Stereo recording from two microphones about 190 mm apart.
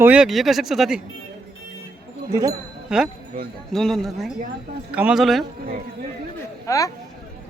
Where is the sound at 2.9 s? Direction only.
5° right (ahead or behind).